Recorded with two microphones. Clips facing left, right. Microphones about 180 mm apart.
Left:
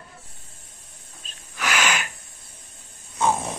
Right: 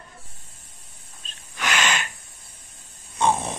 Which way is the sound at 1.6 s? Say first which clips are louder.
Even; 5° left (ahead or behind).